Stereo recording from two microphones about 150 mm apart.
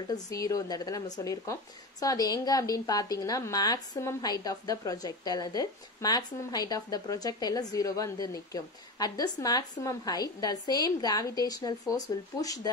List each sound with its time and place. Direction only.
0.1 s speech: 25° left (ahead or behind)